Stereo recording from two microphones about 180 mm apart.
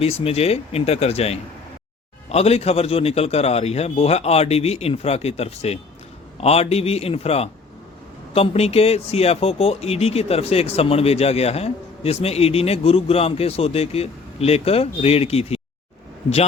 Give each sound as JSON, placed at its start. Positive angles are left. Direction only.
{"t": 0.0, "sound": "speech", "side_deg": 35}